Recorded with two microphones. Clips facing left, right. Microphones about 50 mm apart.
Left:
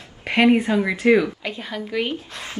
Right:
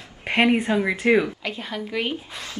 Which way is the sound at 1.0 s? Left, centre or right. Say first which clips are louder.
Left 3 dB; right.